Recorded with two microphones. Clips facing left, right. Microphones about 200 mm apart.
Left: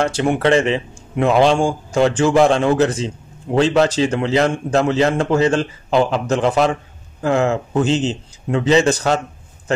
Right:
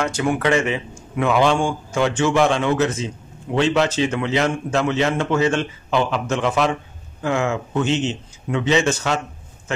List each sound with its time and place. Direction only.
0.0 s a man's voice: 30° left (ahead or behind)